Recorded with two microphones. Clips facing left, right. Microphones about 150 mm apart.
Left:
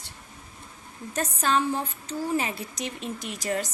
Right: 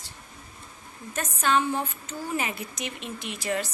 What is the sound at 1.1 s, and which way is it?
Speech, 35° left (ahead or behind).